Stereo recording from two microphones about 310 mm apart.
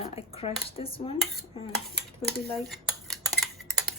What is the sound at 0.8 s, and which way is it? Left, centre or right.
Dishes, centre.